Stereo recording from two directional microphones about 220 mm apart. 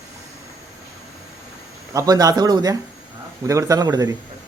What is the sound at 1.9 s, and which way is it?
Speech, 15° right (ahead or behind).